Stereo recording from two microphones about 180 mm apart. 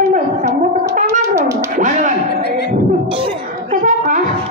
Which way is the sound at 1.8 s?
45° right (ahead or behind).